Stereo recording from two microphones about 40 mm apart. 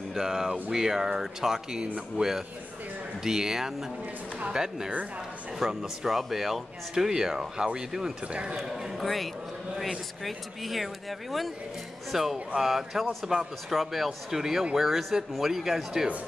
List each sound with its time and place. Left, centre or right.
0.1 s speech: centre
2.2 s a man's voice: right
3.3 s speech: centre
8.3 s a man's voice: right
8.5 s speech: centre
8.9 s speech: centre